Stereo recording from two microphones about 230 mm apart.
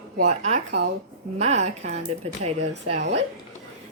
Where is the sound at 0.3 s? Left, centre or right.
Right.